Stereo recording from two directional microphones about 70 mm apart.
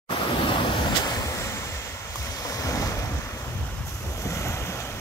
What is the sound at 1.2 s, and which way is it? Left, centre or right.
Waves, left.